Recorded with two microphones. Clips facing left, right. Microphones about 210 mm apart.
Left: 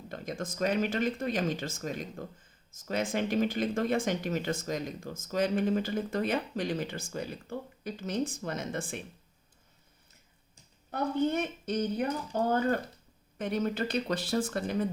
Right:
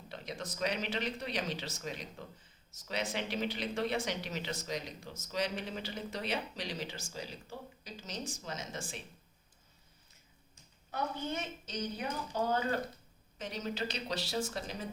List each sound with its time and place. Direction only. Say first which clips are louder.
0.1 s speech: left 5 dB; 50° left (ahead or behind)
10.9 s speech: left 9 dB; 55° left (ahead or behind)